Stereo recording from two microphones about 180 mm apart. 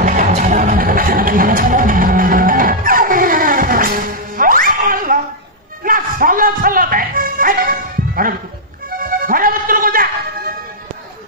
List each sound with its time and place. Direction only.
0.0 s music: 45° right (ahead or behind)